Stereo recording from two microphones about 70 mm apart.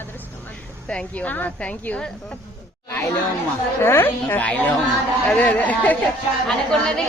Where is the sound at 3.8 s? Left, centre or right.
Left.